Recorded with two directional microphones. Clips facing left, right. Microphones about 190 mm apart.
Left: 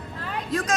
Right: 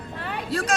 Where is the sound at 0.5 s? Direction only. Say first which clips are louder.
Even; 30° right (ahead or behind).